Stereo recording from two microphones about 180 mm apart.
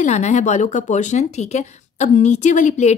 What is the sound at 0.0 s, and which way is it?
Speech, 40° left (ahead or behind).